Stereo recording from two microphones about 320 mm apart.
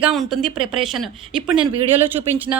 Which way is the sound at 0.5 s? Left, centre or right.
Centre.